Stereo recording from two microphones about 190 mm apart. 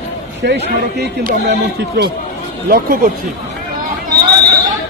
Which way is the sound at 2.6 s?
50° right (ahead or behind).